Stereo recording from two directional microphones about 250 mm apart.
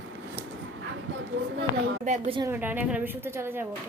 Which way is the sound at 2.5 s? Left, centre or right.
Centre.